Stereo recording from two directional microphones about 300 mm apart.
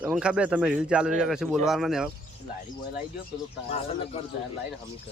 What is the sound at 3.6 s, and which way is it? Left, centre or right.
Speech, left.